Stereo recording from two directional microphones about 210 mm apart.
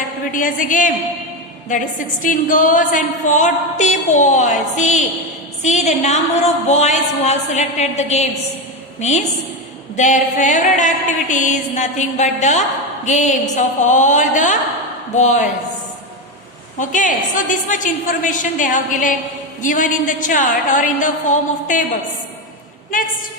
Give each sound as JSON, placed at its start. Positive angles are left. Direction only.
{"t": 0.3, "sound": "a woman's voice", "side_deg": 40}
{"t": 16.7, "sound": "a woman's voice", "side_deg": 35}